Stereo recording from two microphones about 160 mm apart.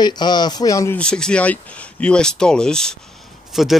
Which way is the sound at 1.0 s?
5° left (ahead or behind).